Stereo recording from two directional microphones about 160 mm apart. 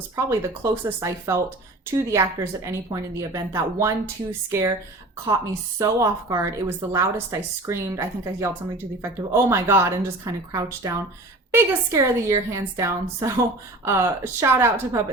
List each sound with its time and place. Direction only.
0.2 s a woman's voice: 20° right (ahead or behind)
5.8 s a woman's voice: 20° right (ahead or behind)